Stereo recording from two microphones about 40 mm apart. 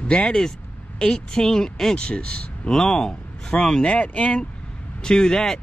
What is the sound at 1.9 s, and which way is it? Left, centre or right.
Speech, left.